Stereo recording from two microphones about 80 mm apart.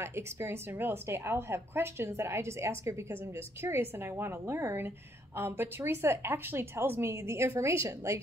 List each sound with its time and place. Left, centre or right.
0.0 s a woman's voice: right